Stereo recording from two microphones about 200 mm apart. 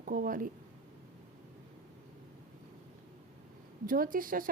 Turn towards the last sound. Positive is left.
turn(degrees=-45)  # may be behind; listen again after turning